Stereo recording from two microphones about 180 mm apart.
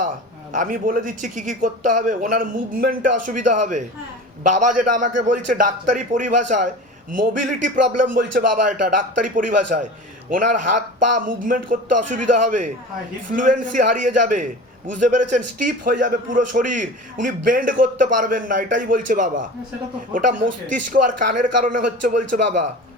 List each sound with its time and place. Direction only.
0.5 s a man's voice: 45° right (ahead or behind)
20.9 s a man's voice: 50° right (ahead or behind)